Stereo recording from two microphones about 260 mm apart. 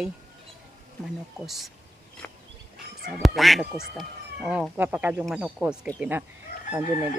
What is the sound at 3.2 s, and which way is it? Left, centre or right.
Speech, centre.